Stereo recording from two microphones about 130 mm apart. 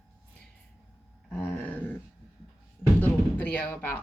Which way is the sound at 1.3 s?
10° left (ahead or behind).